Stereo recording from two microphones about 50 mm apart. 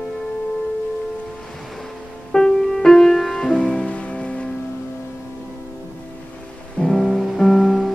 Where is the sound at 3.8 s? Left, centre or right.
Left.